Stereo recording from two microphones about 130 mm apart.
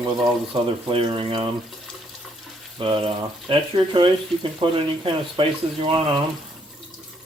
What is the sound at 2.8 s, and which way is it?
Speech, 40° right (ahead or behind).